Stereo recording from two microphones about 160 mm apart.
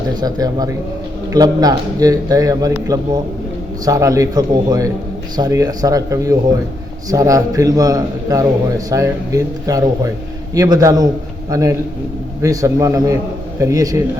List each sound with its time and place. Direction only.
0.2 s a man's voice: 25° right (ahead or behind)